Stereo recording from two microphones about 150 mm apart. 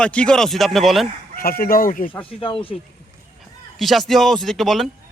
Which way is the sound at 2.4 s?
35° left (ahead or behind).